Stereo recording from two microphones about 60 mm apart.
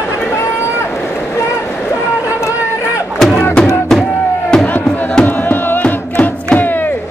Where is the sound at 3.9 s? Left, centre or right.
Centre.